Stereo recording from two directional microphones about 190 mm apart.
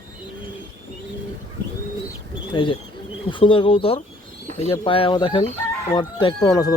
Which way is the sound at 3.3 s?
25° left (ahead or behind).